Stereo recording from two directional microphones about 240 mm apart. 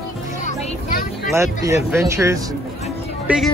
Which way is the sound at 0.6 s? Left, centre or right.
Left.